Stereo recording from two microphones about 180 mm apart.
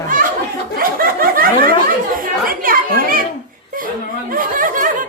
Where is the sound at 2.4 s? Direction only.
50° right (ahead or behind).